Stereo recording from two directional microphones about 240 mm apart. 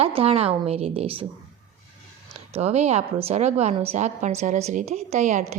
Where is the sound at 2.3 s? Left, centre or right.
Right.